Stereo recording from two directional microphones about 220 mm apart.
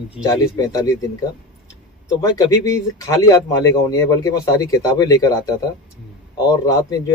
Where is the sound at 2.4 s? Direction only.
15° left (ahead or behind).